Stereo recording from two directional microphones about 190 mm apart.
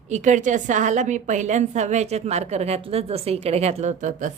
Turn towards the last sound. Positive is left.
turn(degrees=-40)  # may be behind; listen again after turning